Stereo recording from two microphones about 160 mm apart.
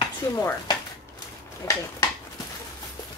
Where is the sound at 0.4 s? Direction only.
15° left (ahead or behind).